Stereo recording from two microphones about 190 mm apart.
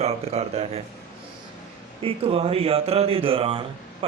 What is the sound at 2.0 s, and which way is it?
Speech, 30° right (ahead or behind).